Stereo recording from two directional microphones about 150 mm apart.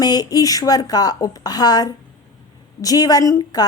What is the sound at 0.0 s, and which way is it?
A woman's voice, 25° left (ahead or behind).